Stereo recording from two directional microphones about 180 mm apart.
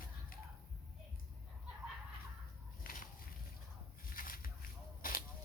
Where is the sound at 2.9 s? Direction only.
50° left (ahead or behind).